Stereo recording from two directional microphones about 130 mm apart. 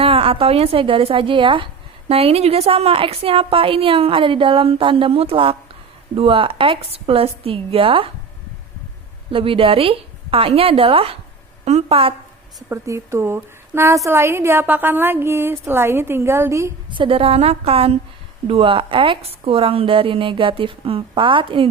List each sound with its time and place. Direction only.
0.0 s a woman's voice: 45° right (ahead or behind)
2.0 s a woman's voice: 50° right (ahead or behind)
9.3 s a woman's voice: 45° right (ahead or behind)
12.6 s a woman's voice: 20° right (ahead or behind)
16.9 s a woman's voice: 40° right (ahead or behind)